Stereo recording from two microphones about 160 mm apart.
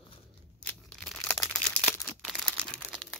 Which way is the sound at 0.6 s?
5° left (ahead or behind).